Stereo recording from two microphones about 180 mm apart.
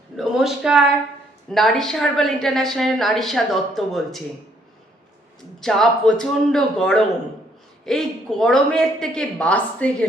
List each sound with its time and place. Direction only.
0.2 s a woman's voice: centre (ahead or behind)
5.5 s a woman's voice: centre (ahead or behind)